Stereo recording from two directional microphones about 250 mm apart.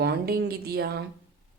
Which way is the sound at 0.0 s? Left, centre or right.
Right.